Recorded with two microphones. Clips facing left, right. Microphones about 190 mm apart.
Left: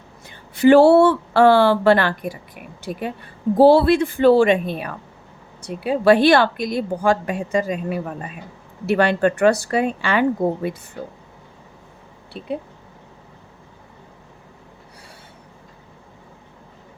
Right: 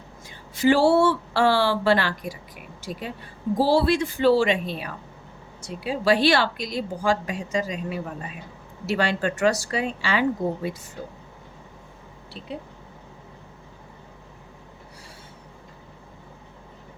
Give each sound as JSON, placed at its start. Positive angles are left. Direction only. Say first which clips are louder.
{"t": 0.3, "sound": "a woman's voice", "louder": "left 7 dB", "side_deg": 60}